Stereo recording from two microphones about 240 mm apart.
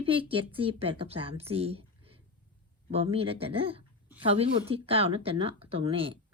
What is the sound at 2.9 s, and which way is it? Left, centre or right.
Speech, right.